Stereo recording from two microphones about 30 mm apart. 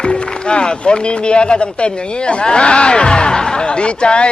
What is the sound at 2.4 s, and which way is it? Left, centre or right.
Speech, left.